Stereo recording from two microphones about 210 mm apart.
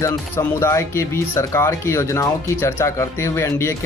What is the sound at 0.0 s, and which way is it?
Speech, 15° left (ahead or behind).